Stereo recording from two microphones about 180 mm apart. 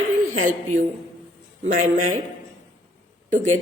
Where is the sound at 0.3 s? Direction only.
45° right (ahead or behind).